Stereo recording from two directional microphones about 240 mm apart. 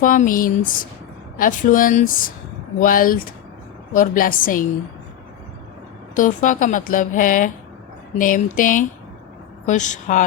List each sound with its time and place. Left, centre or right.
0.0 s speech: left
6.1 s speech: left